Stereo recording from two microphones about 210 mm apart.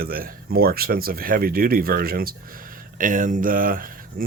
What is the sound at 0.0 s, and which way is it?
Speech, 45° right (ahead or behind).